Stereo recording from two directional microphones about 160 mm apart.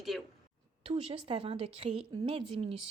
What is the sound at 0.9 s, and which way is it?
Speech, 35° right (ahead or behind).